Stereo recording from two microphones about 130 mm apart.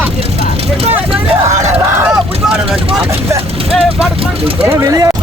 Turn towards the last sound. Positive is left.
turn(degrees=-25)  # may be behind; listen again after turning